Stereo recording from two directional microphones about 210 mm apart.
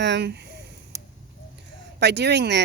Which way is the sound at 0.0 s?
55° right (ahead or behind).